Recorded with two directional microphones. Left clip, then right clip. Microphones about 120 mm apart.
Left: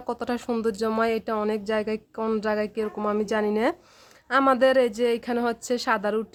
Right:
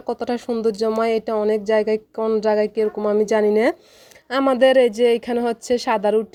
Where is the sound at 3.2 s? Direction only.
30° right (ahead or behind).